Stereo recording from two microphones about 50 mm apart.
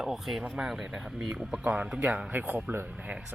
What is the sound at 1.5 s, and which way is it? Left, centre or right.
Speech, right.